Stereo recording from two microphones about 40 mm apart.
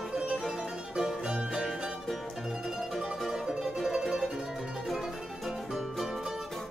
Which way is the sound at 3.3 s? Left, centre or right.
Centre.